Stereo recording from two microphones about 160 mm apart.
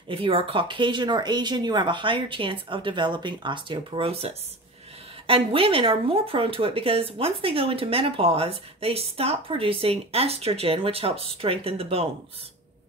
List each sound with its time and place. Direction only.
0.1 s speech: 35° right (ahead or behind)